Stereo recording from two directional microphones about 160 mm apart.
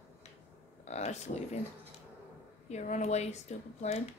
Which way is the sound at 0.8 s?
45° left (ahead or behind).